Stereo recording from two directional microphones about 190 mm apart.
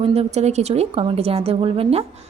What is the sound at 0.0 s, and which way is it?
Speech, 30° right (ahead or behind).